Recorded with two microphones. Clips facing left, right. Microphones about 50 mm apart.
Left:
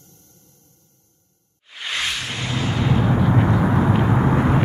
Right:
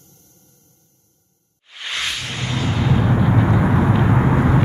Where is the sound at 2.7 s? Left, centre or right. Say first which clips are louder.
Right 1 dB; centre.